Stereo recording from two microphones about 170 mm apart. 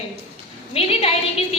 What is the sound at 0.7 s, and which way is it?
Speech, 35° left (ahead or behind).